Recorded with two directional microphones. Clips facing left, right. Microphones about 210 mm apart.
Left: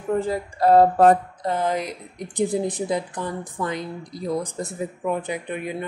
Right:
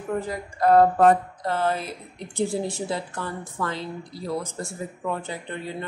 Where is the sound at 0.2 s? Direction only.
30° left (ahead or behind).